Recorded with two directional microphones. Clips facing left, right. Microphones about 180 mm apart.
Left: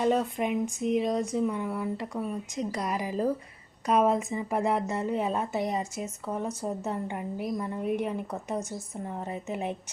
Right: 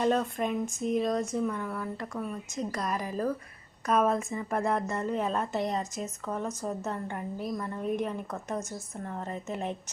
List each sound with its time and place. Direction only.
0.0 s speech: 10° left (ahead or behind)